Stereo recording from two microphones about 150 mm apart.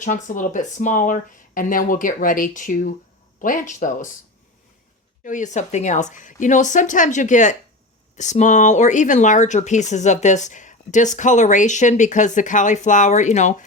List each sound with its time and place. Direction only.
0.0 s speech: 55° left (ahead or behind)
5.2 s speech: 55° left (ahead or behind)